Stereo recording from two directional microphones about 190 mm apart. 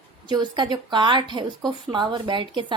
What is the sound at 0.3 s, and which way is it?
A woman's voice, 25° right (ahead or behind).